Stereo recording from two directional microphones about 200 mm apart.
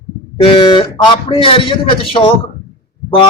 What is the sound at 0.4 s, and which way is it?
Speech, 25° left (ahead or behind).